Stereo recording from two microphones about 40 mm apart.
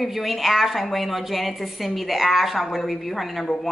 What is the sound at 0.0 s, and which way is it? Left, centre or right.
A woman's voice, centre.